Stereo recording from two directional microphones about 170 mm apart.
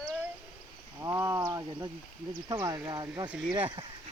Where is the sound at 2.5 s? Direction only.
20° right (ahead or behind).